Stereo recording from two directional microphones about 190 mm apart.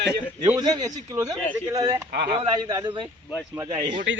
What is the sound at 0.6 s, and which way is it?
A man's voice, 20° right (ahead or behind).